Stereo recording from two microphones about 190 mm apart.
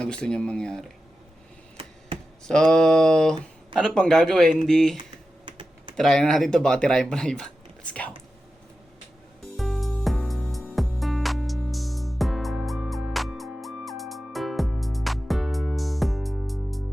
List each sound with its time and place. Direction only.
0.0 s speech: 5° left (ahead or behind)
2.5 s speech: 5° left (ahead or behind)
5.5 s typing: 25° right (ahead or behind)
6.0 s speech: centre (ahead or behind)
9.6 s music: centre (ahead or behind)